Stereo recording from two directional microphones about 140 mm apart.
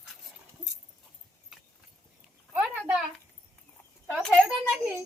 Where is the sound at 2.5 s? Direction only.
10° right (ahead or behind).